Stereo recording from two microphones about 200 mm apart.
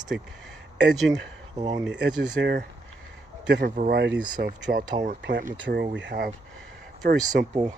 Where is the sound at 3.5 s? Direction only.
45° right (ahead or behind).